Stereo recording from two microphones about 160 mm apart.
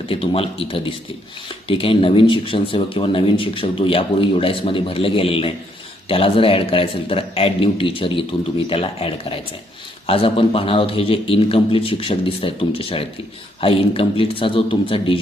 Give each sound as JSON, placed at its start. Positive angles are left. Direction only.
{"t": 0.1, "sound": "speech", "side_deg": 35}